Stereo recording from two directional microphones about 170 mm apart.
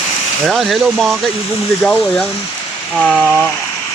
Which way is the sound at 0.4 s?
Centre (ahead or behind).